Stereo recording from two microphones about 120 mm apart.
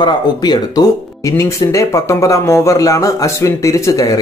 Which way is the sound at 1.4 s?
25° left (ahead or behind).